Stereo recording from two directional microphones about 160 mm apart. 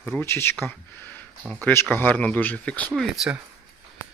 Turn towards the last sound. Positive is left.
turn(degrees=-5)  # may be behind; listen again after turning